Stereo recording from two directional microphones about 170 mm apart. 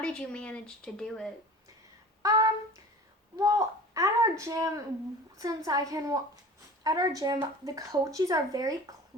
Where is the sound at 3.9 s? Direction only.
20° right (ahead or behind).